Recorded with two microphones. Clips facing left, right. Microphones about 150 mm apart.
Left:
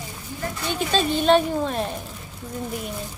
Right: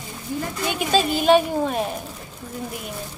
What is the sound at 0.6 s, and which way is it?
Speech, 10° right (ahead or behind).